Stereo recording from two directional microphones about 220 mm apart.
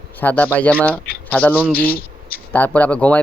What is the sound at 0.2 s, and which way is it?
Speech, 10° left (ahead or behind).